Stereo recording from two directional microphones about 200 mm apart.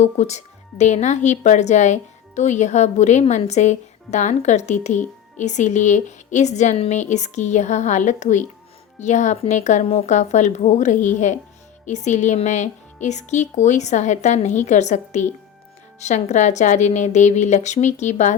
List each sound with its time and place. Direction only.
0.0 s speech: 35° left (ahead or behind)